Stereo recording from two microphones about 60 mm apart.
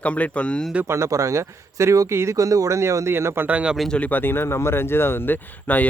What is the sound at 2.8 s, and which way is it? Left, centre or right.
Speech, right.